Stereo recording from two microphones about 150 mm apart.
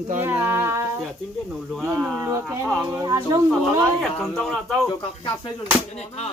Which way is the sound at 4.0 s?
Centre (ahead or behind).